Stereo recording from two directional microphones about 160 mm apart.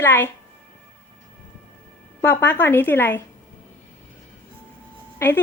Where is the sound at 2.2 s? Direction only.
10° left (ahead or behind).